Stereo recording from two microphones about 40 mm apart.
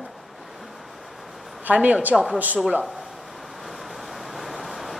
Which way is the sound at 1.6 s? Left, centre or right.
Right.